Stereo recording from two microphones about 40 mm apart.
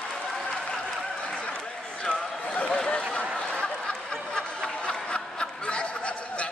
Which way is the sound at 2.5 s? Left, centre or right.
Left.